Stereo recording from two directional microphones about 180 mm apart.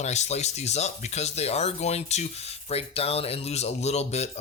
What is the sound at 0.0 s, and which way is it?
Speech, 40° left (ahead or behind).